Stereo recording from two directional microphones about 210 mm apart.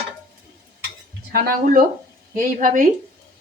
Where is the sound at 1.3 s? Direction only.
45° right (ahead or behind).